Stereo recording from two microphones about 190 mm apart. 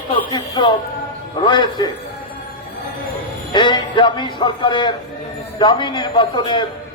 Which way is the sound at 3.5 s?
25° left (ahead or behind).